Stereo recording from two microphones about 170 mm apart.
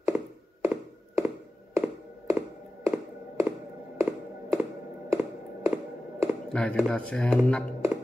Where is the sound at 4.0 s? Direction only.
15° right (ahead or behind).